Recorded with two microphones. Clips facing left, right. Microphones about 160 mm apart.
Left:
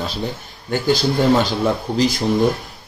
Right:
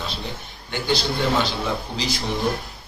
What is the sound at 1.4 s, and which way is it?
Speech, 45° left (ahead or behind).